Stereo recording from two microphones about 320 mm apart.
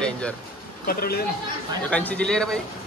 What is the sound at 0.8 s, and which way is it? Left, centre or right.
Speech, left.